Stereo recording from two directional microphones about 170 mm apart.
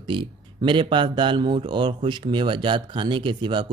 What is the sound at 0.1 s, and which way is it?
Speech, 30° right (ahead or behind).